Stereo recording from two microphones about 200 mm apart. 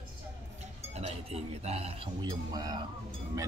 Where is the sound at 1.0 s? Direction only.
30° right (ahead or behind).